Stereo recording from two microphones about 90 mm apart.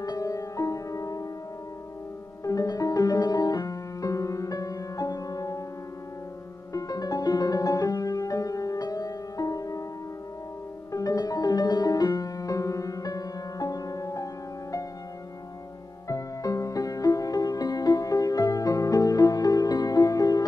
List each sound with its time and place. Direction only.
0.0 s music: 40° left (ahead or behind)
2.4 s music: 40° left (ahead or behind)
6.7 s music: 45° left (ahead or behind)
10.9 s music: 40° left (ahead or behind)
16.1 s music: 40° left (ahead or behind)